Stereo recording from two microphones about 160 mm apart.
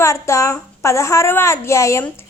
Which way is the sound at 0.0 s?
20° left (ahead or behind).